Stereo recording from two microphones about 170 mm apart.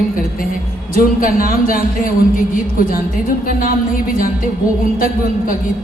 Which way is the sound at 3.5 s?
55° left (ahead or behind).